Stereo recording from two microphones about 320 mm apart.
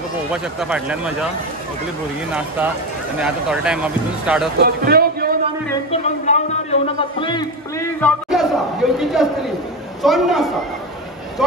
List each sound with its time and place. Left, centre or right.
0.3 s speech: centre
3.2 s speech: centre
4.6 s a man's voice: right
5.9 s a man's voice: left; by 10.5 s centre